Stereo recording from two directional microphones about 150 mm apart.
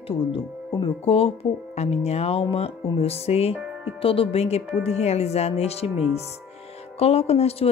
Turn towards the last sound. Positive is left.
turn(degrees=45)  # may be behind; listen again after turning